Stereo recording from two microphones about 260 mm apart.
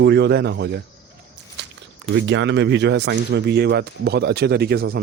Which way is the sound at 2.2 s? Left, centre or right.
Right.